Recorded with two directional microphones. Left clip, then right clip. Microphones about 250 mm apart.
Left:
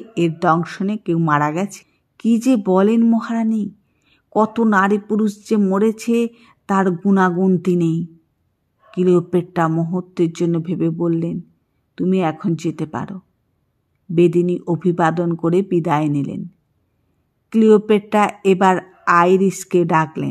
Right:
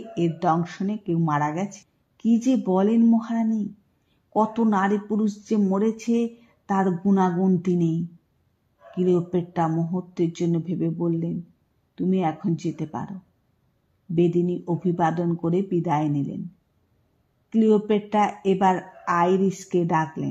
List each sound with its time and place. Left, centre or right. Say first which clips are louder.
0.1 s speech: left 6 dB; centre
17.5 s speech: left 8 dB; left